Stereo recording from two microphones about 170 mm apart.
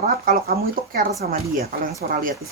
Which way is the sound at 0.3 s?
55° right (ahead or behind).